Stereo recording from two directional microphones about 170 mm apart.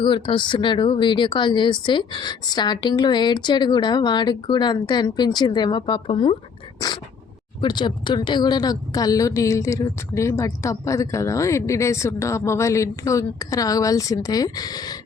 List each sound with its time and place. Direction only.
0.0 s speech: 30° left (ahead or behind)
6.7 s a sound: 25° left (ahead or behind)
7.6 s speech: 25° left (ahead or behind)